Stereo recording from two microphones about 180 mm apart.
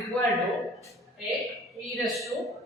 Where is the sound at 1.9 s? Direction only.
Centre (ahead or behind).